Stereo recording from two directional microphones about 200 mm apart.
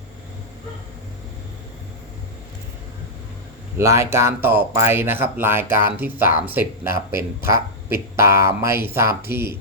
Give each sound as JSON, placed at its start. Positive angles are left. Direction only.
{"t": 3.8, "sound": "speech", "side_deg": -15}